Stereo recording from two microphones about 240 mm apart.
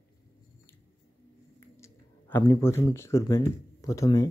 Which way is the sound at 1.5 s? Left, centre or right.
Centre.